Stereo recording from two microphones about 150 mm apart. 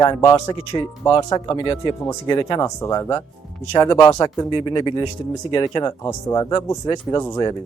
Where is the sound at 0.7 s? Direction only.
30° left (ahead or behind).